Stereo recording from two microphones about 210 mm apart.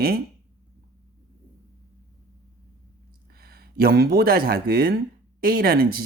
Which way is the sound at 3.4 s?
50° right (ahead or behind).